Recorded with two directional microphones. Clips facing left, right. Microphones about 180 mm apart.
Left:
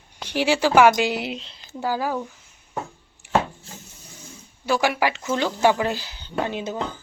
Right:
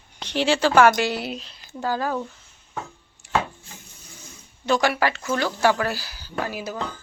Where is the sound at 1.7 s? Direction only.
10° left (ahead or behind).